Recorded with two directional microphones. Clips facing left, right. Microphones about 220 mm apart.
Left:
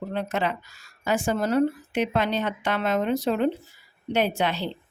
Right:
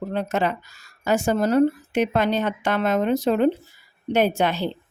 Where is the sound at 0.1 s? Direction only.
45° right (ahead or behind).